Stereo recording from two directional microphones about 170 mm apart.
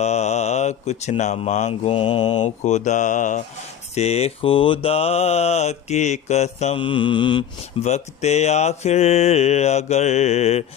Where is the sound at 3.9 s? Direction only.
40° left (ahead or behind).